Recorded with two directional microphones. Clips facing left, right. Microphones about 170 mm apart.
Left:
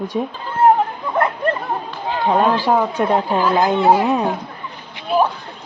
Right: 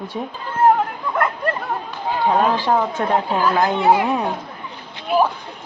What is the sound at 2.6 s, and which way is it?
Speech, 10° left (ahead or behind).